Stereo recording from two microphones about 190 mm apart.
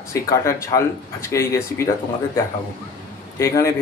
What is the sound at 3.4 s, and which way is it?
Speech, 15° left (ahead or behind).